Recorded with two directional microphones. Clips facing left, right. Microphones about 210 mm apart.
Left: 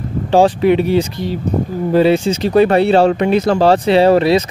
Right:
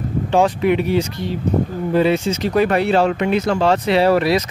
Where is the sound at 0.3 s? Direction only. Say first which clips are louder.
Left 5 dB; 30° left (ahead or behind).